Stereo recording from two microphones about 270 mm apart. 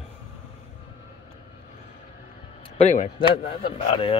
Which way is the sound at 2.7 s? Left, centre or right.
Left.